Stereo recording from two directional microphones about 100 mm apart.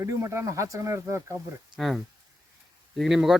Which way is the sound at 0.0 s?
30° right (ahead or behind).